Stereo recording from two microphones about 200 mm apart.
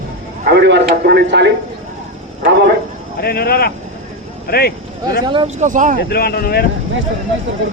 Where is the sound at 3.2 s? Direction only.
50° left (ahead or behind).